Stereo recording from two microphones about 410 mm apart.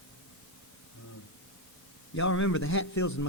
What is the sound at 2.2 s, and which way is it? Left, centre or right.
Speech, left.